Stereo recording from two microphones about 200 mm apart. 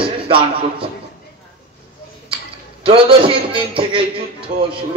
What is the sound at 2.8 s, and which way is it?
A man's voice, 25° right (ahead or behind).